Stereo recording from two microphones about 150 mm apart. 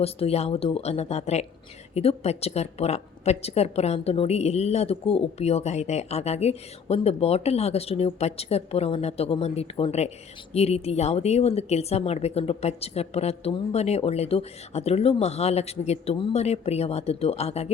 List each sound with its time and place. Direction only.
0.0 s a woman's voice: 40° left (ahead or behind)